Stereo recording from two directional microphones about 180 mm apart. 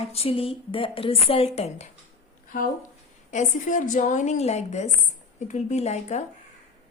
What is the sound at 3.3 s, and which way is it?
A woman's voice, 45° left (ahead or behind).